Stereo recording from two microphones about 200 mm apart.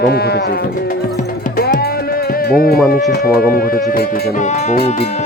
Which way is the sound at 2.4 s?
50° left (ahead or behind).